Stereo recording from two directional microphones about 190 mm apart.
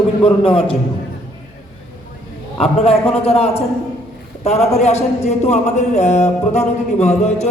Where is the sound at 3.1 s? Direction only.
30° left (ahead or behind).